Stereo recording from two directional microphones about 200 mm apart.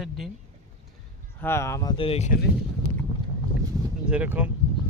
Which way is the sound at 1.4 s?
15° left (ahead or behind).